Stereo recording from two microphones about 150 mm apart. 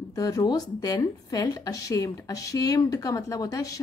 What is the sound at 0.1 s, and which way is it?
A woman's voice, 25° left (ahead or behind).